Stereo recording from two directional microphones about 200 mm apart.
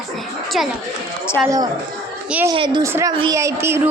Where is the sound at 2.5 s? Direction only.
20° right (ahead or behind).